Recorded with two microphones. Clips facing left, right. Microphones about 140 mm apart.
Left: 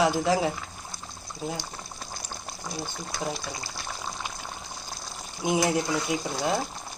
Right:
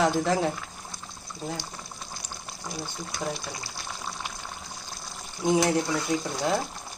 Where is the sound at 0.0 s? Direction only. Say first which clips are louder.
Even; 5° left (ahead or behind).